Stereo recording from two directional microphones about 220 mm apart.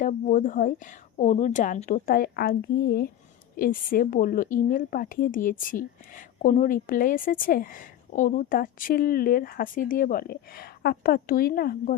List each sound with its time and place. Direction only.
0.0 s speech: 35° left (ahead or behind)